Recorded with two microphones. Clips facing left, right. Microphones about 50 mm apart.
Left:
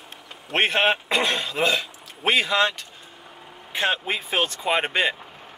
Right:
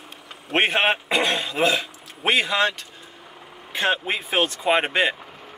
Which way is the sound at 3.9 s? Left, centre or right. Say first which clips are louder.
Right 2 dB; centre.